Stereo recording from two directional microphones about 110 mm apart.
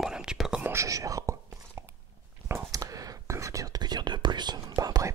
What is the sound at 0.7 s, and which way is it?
Whispering, 30° right (ahead or behind).